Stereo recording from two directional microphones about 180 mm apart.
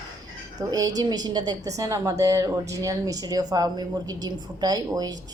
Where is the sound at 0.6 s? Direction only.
20° right (ahead or behind).